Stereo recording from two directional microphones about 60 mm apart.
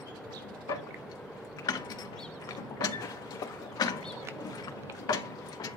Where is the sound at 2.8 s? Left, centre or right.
Left.